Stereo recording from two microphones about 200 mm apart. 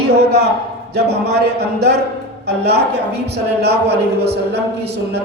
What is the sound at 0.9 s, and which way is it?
A man's voice, 55° right (ahead or behind).